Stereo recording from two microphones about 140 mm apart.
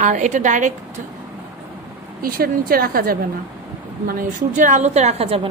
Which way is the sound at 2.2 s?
90° right.